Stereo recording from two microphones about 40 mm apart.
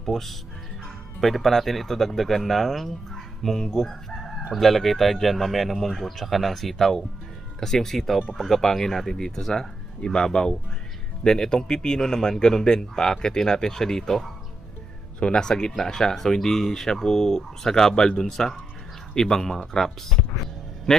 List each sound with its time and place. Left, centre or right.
0.0 s speech: centre
3.4 s chicken: centre
4.5 s speech: centre
15.2 s speech: left